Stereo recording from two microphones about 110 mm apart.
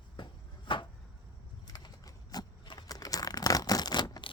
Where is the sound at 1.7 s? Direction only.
35° left (ahead or behind).